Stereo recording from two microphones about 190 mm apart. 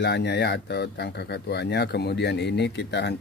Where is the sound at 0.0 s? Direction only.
65° left (ahead or behind).